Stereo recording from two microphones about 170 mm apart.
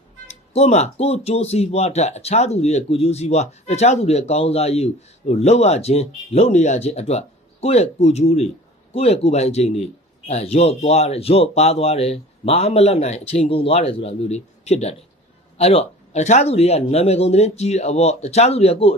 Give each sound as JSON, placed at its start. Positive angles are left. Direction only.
{"t": 0.3, "sound": "speech", "side_deg": 40}